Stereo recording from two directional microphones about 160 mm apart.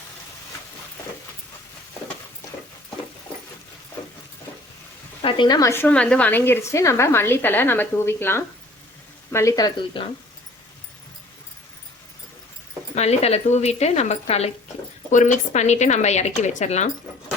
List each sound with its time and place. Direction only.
5.2 s a woman's voice: 25° left (ahead or behind)
12.9 s speech: 40° left (ahead or behind)